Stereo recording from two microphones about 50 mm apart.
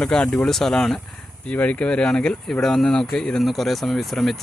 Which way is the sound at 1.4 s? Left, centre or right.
Left.